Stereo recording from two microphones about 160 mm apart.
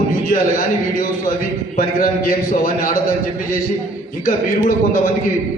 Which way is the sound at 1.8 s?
60° left (ahead or behind).